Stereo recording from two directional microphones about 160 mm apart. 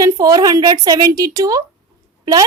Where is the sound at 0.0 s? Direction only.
20° right (ahead or behind).